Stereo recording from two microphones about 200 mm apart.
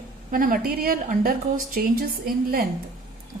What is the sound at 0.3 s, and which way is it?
A woman's voice, 45° right (ahead or behind).